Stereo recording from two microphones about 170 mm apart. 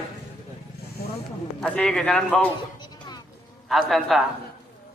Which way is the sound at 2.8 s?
25° left (ahead or behind).